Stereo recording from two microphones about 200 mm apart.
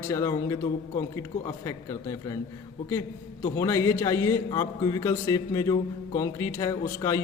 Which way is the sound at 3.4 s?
15° left (ahead or behind).